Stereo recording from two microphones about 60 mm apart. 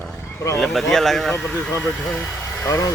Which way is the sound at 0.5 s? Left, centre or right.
Centre.